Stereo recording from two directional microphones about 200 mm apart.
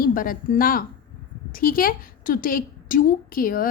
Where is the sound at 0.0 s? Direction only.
45° left (ahead or behind).